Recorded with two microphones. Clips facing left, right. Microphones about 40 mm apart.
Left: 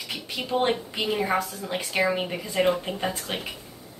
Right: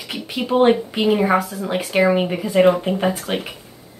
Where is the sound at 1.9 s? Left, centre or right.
Right.